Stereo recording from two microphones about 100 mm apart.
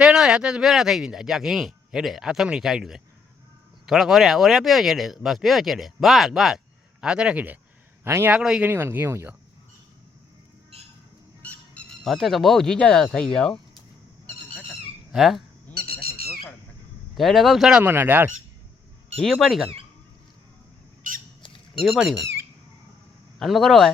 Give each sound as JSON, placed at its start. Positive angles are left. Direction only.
{"t": 0.0, "sound": "speech", "side_deg": -5}
{"t": 8.0, "sound": "a man's voice", "side_deg": -30}
{"t": 8.3, "sound": "speech", "side_deg": -10}
{"t": 8.7, "sound": "speech", "side_deg": -20}
{"t": 11.4, "sound": "a sound", "side_deg": 15}
{"t": 12.0, "sound": "speech", "side_deg": 0}
{"t": 14.3, "sound": "a sound", "side_deg": 15}
{"t": 15.1, "sound": "speech", "side_deg": -5}
{"t": 15.7, "sound": "bird", "side_deg": 15}
{"t": 17.2, "sound": "speech", "side_deg": 0}
{"t": 17.8, "sound": "speech", "side_deg": -20}
{"t": 19.2, "sound": "speech", "side_deg": 0}
{"t": 21.8, "sound": "speech", "side_deg": -5}
{"t": 23.4, "sound": "speech", "side_deg": 0}